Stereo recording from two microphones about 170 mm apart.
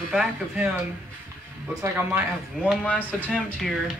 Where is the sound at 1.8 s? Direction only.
10° right (ahead or behind).